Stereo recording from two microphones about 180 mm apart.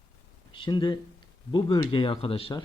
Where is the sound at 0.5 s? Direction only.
25° left (ahead or behind).